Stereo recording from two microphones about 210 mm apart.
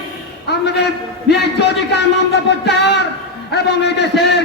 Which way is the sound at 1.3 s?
55° left (ahead or behind).